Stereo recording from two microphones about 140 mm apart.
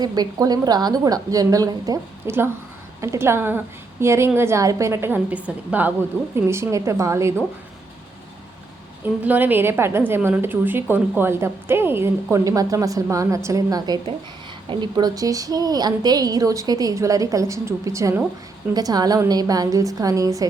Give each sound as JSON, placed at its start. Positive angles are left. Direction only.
{"t": 0.0, "sound": "a woman's voice", "side_deg": -30}
{"t": 9.2, "sound": "a woman's voice", "side_deg": -10}